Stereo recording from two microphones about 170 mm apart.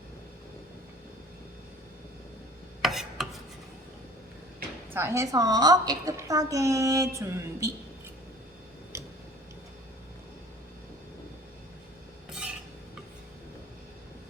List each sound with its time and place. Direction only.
2.8 s chopping: centre (ahead or behind)
4.9 s a woman's voice: 15° right (ahead or behind)